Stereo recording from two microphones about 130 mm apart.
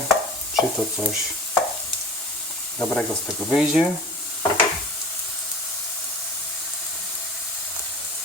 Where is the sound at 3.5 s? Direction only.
10° right (ahead or behind).